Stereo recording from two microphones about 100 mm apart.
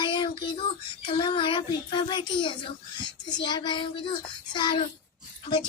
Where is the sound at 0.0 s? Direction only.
55° left (ahead or behind).